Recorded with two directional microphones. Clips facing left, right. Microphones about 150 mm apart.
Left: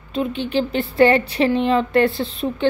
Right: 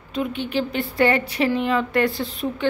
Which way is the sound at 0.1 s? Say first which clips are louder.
Left 3 dB; 30° left (ahead or behind).